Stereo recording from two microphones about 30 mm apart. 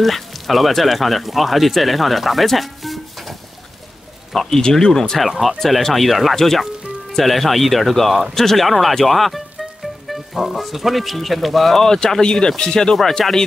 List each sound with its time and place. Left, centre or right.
0.0 s speech: centre
4.3 s speech: centre
5.2 s speech: centre
6.3 s speech: centre
11.8 s speech: centre
13.2 s speech: centre